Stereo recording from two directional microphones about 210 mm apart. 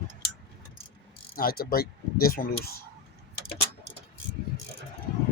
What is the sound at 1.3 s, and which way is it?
Speech, 45° left (ahead or behind).